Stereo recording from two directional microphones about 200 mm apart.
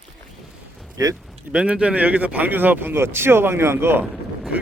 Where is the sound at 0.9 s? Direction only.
20° right (ahead or behind).